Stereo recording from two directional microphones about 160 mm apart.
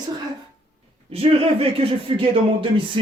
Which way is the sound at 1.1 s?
35° right (ahead or behind).